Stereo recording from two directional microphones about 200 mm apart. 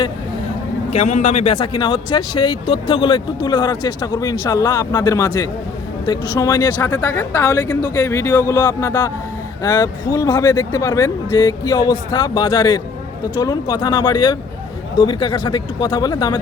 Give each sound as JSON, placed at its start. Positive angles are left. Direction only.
{"t": 0.9, "sound": "speech", "side_deg": 35}